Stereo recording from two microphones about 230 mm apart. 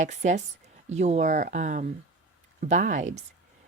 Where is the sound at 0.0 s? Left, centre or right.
Right.